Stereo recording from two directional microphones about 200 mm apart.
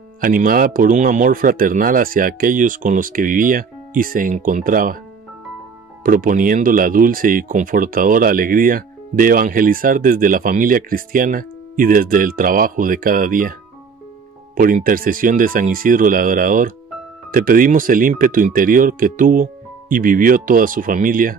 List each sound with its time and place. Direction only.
0.2 s speech: 45° right (ahead or behind)
6.0 s speech: 45° right (ahead or behind)